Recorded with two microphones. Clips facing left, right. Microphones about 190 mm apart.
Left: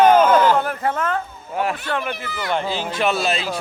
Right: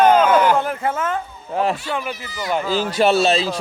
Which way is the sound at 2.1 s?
60° left (ahead or behind).